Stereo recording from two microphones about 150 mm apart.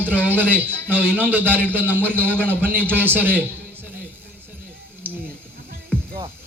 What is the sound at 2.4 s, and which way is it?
A man's voice, 10° right (ahead or behind).